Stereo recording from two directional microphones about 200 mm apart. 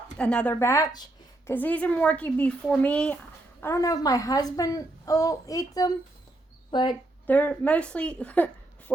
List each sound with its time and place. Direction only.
0.2 s a woman's voice: 5° left (ahead or behind); by 6.9 s 25° left (ahead or behind)
7.3 s a woman's voice: 5° left (ahead or behind)